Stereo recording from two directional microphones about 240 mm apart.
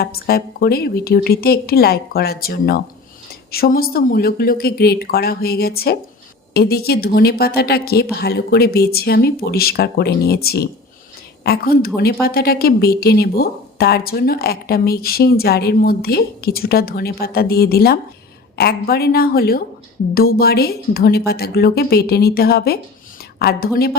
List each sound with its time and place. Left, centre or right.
0.0 s a woman's voice: left